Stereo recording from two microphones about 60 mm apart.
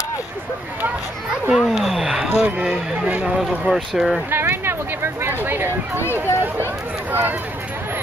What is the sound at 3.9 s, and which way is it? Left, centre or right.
Speech, centre.